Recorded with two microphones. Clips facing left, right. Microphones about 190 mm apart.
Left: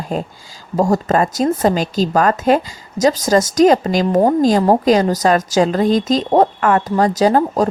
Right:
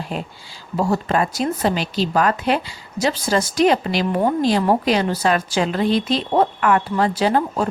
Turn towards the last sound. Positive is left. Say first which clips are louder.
# left 5 dB
turn(degrees=40)  # may be behind; listen again after turning